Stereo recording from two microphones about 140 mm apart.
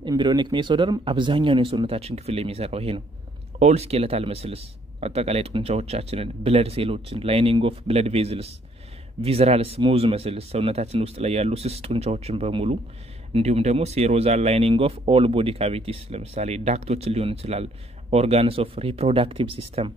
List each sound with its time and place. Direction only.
0.0 s a man's voice: 30° right (ahead or behind)